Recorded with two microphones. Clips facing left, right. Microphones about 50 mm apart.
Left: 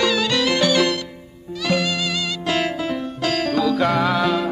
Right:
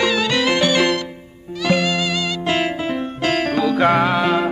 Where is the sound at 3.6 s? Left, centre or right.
Right.